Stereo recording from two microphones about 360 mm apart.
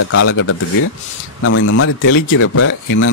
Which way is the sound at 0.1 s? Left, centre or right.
Left.